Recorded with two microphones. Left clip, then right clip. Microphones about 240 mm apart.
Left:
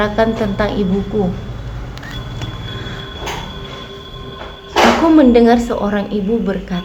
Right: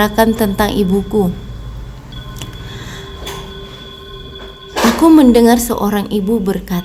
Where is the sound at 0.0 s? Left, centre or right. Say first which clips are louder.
Right 2 dB; right.